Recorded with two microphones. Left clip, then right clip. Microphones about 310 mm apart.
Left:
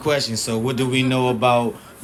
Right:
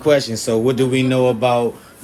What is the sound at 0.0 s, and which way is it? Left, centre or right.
A man's voice, centre.